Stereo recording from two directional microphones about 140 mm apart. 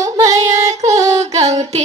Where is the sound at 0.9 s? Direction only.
20° right (ahead or behind).